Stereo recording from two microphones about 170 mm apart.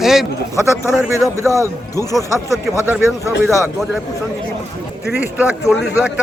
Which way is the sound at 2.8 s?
15° right (ahead or behind).